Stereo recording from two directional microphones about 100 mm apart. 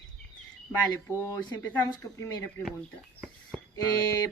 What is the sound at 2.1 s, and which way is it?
Speech, 35° left (ahead or behind).